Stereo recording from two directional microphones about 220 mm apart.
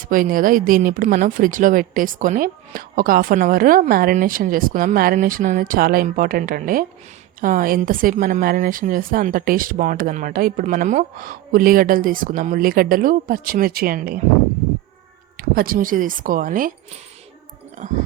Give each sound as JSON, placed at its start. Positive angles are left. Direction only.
{"t": 0.1, "sound": "speech", "side_deg": -40}
{"t": 15.4, "sound": "speech", "side_deg": -40}
{"t": 17.8, "sound": "speech", "side_deg": -35}